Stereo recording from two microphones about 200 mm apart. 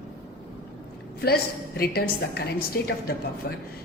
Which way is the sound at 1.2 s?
50° left (ahead or behind).